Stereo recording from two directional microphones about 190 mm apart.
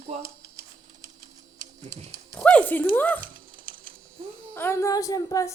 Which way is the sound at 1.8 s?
35° right (ahead or behind).